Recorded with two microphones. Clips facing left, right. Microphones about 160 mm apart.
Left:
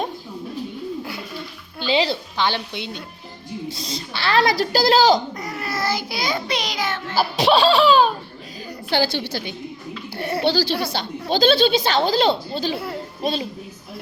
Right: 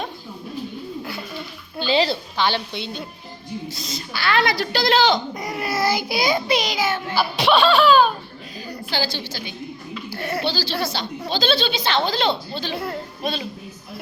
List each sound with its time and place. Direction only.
1.9 s a woman's voice: 20° left (ahead or behind)
3.7 s a woman's voice: 30° left (ahead or behind)
5.3 s a child's voice: 15° right (ahead or behind)
7.2 s a woman's voice: 40° left (ahead or behind)
8.9 s a woman's voice: 60° left (ahead or behind)
10.4 s a woman's voice: 60° left (ahead or behind); by 12.3 s 40° left (ahead or behind)
12.7 s a woman's voice: 5° left (ahead or behind)
13.2 s a woman's voice: 35° left (ahead or behind)